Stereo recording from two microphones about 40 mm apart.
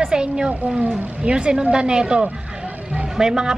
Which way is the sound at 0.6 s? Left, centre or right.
Right.